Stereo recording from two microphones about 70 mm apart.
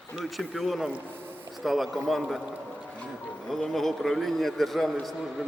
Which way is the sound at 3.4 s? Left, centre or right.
Centre.